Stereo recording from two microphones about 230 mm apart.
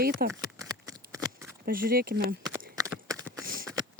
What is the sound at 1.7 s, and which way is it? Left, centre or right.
Speech, right.